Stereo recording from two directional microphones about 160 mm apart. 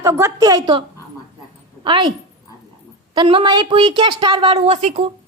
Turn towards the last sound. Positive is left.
turn(degrees=-40)  # may be behind; listen again after turning